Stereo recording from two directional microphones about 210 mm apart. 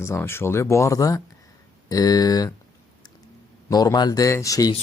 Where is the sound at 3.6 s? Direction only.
20° left (ahead or behind).